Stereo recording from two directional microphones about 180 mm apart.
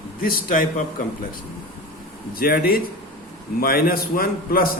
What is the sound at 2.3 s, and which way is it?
A man's voice, 55° left (ahead or behind).